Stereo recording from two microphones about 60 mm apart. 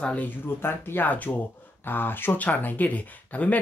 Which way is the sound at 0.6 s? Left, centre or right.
Left.